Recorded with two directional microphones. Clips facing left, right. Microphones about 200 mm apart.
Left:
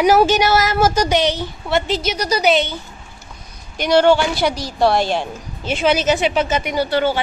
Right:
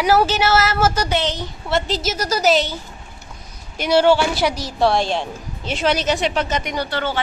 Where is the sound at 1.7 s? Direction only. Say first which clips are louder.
Left 2 dB; centre (ahead or behind).